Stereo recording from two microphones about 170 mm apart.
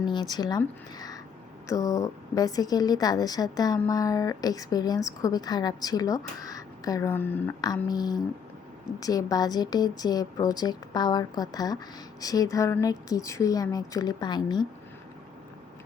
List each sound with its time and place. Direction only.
0.1 s a woman's voice: 25° left (ahead or behind)
0.9 s a sound: 20° left (ahead or behind)
1.6 s a woman's voice: 20° left (ahead or behind)
7.9 s a woman's voice: 25° left (ahead or behind)